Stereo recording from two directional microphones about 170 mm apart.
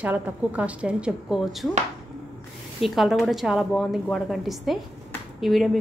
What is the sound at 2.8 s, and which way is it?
A woman's voice, centre (ahead or behind).